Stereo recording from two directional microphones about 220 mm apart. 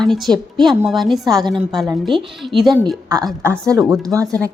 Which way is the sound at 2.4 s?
Centre (ahead or behind).